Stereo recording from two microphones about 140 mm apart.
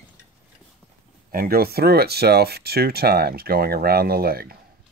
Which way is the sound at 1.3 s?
90° right.